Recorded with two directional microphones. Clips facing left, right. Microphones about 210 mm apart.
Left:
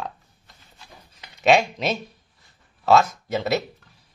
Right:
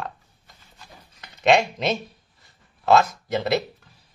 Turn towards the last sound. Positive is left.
turn(degrees=5)  # may be behind; listen again after turning